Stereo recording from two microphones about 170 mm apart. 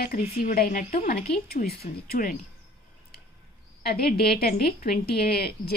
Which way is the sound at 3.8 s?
65° left (ahead or behind).